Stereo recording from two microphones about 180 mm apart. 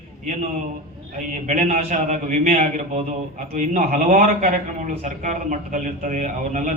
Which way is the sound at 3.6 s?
45° right (ahead or behind).